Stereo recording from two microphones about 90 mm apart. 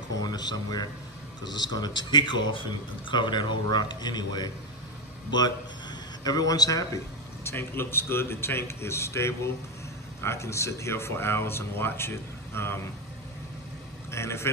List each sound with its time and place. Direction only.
0.2 s speech: 50° left (ahead or behind)
6.2 s a man's voice: 45° left (ahead or behind)
7.4 s a man's voice: 25° left (ahead or behind)
14.1 s a man's voice: 30° left (ahead or behind)